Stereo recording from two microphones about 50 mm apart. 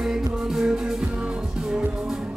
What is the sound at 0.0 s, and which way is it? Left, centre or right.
Music, centre.